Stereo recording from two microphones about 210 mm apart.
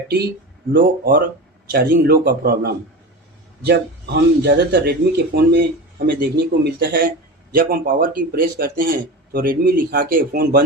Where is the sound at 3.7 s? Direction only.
55° right (ahead or behind).